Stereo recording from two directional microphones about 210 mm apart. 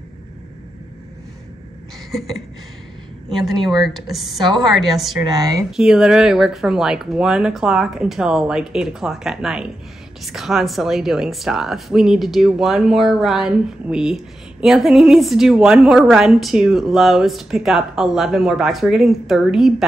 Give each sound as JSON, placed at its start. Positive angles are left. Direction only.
{"t": 3.6, "sound": "speech", "side_deg": 0}
{"t": 5.2, "sound": "speech", "side_deg": -15}
{"t": 5.7, "sound": "speech", "side_deg": -5}